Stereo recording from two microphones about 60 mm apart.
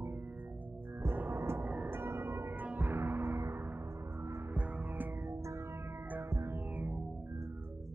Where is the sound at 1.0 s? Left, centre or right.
Right.